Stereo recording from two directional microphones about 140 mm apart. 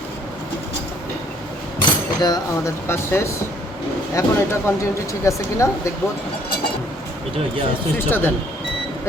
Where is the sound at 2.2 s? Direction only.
25° left (ahead or behind).